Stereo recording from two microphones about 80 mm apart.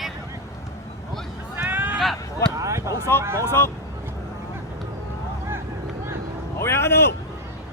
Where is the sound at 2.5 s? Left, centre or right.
Right.